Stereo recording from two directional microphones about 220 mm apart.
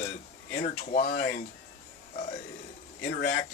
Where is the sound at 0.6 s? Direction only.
35° left (ahead or behind).